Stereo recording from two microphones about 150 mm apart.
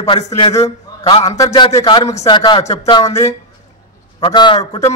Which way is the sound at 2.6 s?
45° left (ahead or behind).